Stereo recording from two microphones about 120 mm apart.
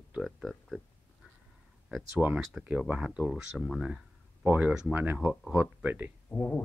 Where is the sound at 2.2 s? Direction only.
15° right (ahead or behind).